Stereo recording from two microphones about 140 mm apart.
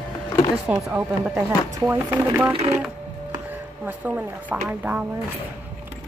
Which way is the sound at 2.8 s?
15° right (ahead or behind).